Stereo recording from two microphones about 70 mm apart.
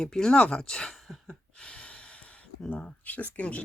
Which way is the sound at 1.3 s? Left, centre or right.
Centre.